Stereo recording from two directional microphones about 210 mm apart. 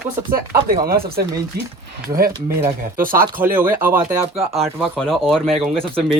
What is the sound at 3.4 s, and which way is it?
A man's voice, 10° right (ahead or behind).